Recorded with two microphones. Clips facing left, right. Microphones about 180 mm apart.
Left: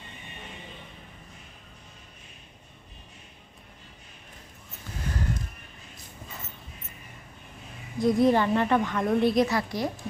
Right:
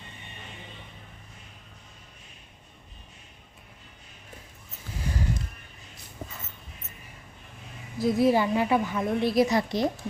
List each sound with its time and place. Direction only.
7.9 s a woman's voice: 5° right (ahead or behind)
9.5 s a woman's voice: 20° right (ahead or behind)